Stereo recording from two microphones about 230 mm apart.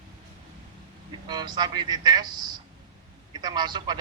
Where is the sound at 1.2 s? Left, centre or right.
Centre.